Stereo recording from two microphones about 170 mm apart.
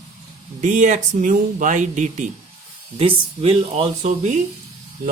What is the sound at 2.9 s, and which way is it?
Speech, 35° right (ahead or behind).